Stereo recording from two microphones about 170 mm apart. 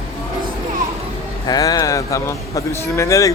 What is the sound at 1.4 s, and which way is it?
A man's voice, 20° left (ahead or behind).